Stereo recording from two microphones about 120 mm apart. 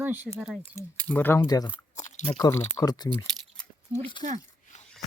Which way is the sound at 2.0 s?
85° left.